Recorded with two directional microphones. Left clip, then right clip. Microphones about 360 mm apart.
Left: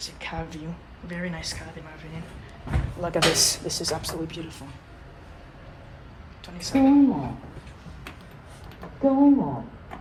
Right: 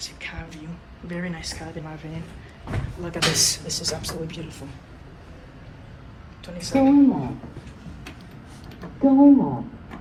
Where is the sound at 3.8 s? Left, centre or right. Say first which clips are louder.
Even; left.